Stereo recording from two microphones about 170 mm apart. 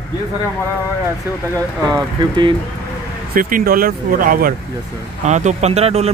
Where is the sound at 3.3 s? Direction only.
55° right (ahead or behind).